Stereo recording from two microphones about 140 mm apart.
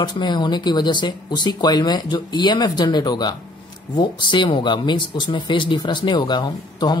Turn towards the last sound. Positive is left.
turn(degrees=30)  # may be behind; listen again after turning